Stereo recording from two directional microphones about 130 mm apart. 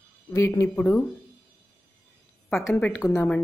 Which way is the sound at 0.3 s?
20° left (ahead or behind).